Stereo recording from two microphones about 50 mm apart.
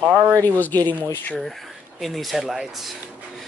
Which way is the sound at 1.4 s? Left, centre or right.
Centre.